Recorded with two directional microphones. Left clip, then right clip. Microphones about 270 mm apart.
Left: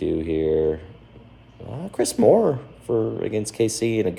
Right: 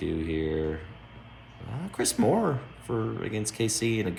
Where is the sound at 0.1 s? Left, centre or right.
Centre.